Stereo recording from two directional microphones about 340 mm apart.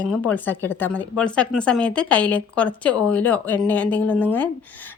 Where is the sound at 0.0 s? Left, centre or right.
Centre.